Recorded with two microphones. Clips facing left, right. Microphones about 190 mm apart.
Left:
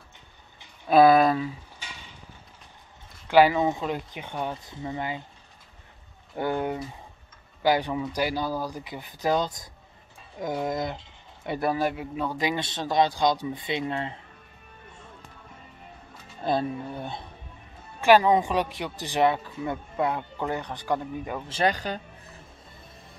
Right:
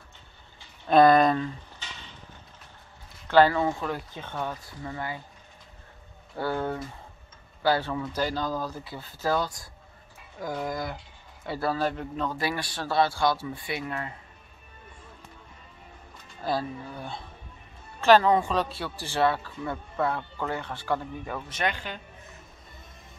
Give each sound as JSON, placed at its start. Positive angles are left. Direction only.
{"t": 0.8, "sound": "speech", "side_deg": 5}
{"t": 3.3, "sound": "speech", "side_deg": 15}
{"t": 6.3, "sound": "speech", "side_deg": 15}
{"t": 16.4, "sound": "speech", "side_deg": 25}
{"t": 21.5, "sound": "speech", "side_deg": 35}